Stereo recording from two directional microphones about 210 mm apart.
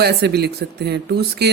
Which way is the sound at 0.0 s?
50° right (ahead or behind).